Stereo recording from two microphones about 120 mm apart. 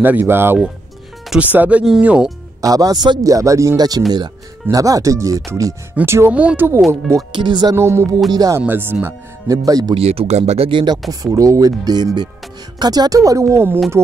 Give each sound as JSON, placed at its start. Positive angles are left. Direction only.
{"t": 0.0, "sound": "speech", "side_deg": -15}
{"t": 2.6, "sound": "a man's voice", "side_deg": -30}
{"t": 7.3, "sound": "a man's voice", "side_deg": -40}
{"t": 7.7, "sound": "speech", "side_deg": -20}
{"t": 8.3, "sound": "a man's voice", "side_deg": -30}
{"t": 8.5, "sound": "speech", "side_deg": -20}
{"t": 9.0, "sound": "a man's voice", "side_deg": -30}
{"t": 9.9, "sound": "speech", "side_deg": -60}
{"t": 10.7, "sound": "speech", "side_deg": -45}
{"t": 11.1, "sound": "a man's voice", "side_deg": -30}